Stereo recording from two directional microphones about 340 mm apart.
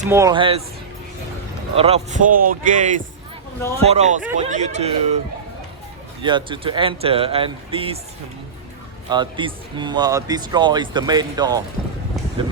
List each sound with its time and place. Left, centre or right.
0.1 s speech: centre
1.7 s speech: centre
6.2 s speech: centre
9.0 s speech: centre